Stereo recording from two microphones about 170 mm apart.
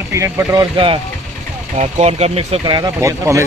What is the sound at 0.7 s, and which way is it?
Speech, 30° right (ahead or behind).